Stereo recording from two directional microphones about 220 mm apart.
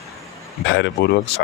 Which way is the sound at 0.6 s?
55° left (ahead or behind).